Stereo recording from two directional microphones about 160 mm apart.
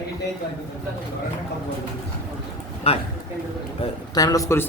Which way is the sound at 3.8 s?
35° left (ahead or behind).